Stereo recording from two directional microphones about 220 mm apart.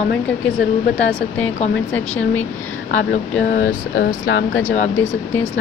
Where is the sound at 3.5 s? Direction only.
40° left (ahead or behind).